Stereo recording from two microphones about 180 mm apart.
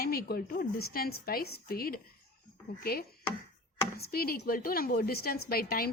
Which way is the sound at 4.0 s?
55° left (ahead or behind).